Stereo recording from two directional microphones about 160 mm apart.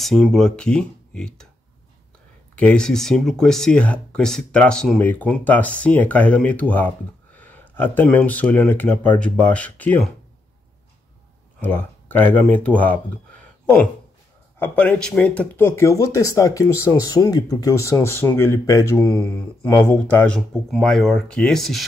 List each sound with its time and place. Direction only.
0.0 s speech: centre (ahead or behind)
2.5 s speech: 5° left (ahead or behind)
11.6 s speech: 10° left (ahead or behind)
14.6 s speech: 10° left (ahead or behind)